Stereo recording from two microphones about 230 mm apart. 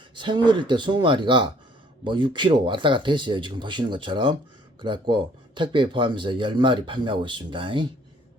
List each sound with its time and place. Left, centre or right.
0.2 s speech: right